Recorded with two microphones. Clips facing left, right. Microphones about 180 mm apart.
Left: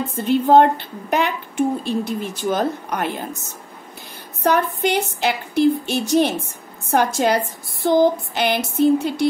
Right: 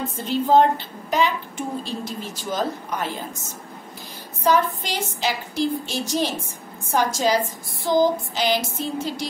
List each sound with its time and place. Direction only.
0.1 s a woman's voice: 60° left (ahead or behind)
4.4 s a woman's voice: 60° left (ahead or behind)